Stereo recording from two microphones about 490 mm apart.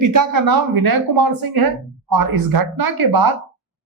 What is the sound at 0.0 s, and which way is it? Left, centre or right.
Speech, right.